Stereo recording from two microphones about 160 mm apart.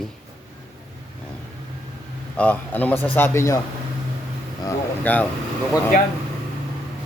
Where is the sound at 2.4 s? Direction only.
10° left (ahead or behind).